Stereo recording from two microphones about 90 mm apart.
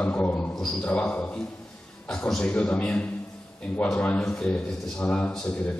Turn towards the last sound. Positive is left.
turn(degrees=15)  # may be behind; listen again after turning